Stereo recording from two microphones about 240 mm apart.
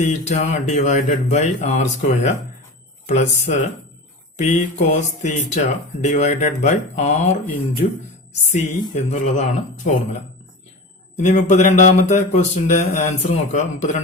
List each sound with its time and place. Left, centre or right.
0.0 s speech: left
11.2 s speech: left